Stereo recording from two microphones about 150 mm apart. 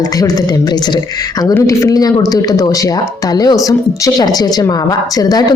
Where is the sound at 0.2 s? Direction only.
25° left (ahead or behind).